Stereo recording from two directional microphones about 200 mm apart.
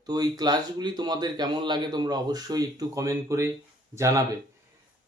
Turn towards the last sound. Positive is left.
turn(degrees=-15)  # may be behind; listen again after turning